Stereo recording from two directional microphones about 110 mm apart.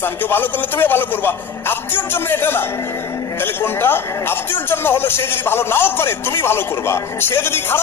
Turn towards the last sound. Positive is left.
turn(degrees=20)  # may be behind; listen again after turning